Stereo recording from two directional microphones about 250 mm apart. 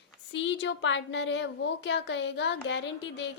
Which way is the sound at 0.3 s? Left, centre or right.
Left.